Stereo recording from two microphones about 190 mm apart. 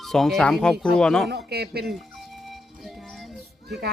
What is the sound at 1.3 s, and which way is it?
Speech, 60° right (ahead or behind).